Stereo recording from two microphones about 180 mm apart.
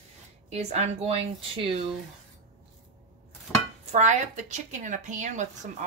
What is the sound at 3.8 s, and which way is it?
A woman's voice, 40° right (ahead or behind).